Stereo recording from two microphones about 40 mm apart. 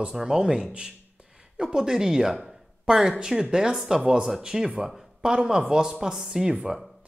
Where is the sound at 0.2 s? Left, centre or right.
Centre.